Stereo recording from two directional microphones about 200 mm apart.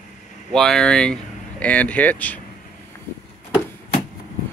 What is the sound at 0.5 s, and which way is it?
Speech, centre (ahead or behind).